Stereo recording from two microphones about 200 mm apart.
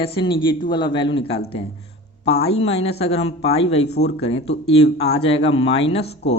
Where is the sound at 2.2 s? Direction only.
30° left (ahead or behind).